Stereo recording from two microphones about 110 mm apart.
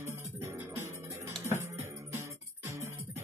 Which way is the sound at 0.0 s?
25° right (ahead or behind).